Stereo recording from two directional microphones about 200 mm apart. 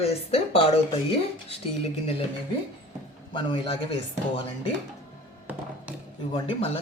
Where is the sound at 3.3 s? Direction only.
25° left (ahead or behind).